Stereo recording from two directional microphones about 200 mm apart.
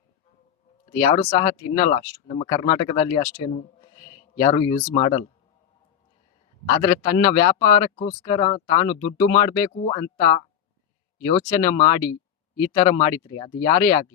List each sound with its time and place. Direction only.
0.9 s speech: 20° left (ahead or behind)
6.7 s speech: 20° left (ahead or behind)